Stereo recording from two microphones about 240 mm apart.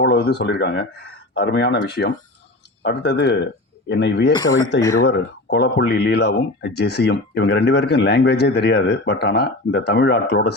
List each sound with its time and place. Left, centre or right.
0.0 s speech: left
4.3 s speech: centre
5.0 s speech: left